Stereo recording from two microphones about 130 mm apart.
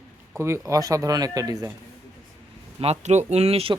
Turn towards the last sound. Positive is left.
turn(degrees=-50)  # may be behind; listen again after turning